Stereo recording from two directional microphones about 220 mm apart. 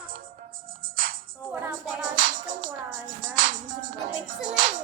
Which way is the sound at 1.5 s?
5° right (ahead or behind).